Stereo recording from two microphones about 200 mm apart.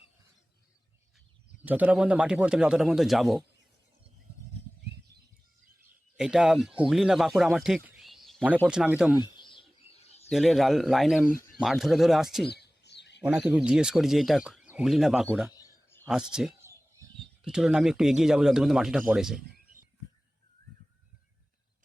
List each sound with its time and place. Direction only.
1.6 s speech: 10° right (ahead or behind)
6.1 s speech: 5° right (ahead or behind)
9.2 s bird: 25° left (ahead or behind)
10.2 s speech: centre (ahead or behind)
12.5 s bird: 55° left (ahead or behind)
13.2 s speech: 5° right (ahead or behind)
15.5 s a sound: 15° left (ahead or behind)
16.0 s speech: 5° right (ahead or behind)